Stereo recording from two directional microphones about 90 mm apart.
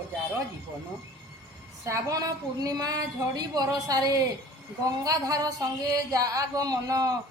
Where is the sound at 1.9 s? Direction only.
35° right (ahead or behind).